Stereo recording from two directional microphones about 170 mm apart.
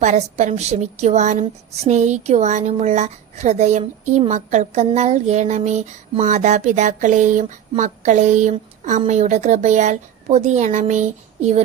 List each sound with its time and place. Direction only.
0.0 s a woman's voice: 45° right (ahead or behind)